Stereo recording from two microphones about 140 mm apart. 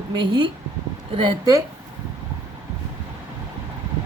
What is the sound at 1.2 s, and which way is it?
Speech, 25° right (ahead or behind).